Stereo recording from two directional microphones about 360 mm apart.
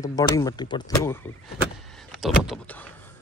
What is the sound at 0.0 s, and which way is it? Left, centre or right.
Speech, centre.